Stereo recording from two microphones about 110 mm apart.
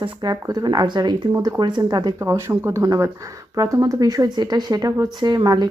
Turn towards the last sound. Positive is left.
turn(degrees=-35)  # may be behind; listen again after turning